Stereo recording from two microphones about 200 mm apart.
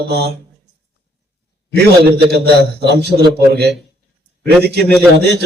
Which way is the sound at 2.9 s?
55° right (ahead or behind).